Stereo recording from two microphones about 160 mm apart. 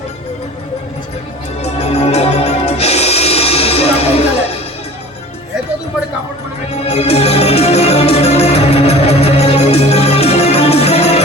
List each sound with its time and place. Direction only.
1.6 s music: 40° left (ahead or behind)
6.7 s music: 40° left (ahead or behind)